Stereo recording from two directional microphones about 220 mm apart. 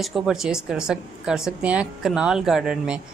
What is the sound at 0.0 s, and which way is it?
A woman's voice, centre (ahead or behind).